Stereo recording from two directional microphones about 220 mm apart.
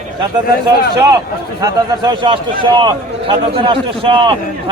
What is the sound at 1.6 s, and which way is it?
Speech, 20° right (ahead or behind).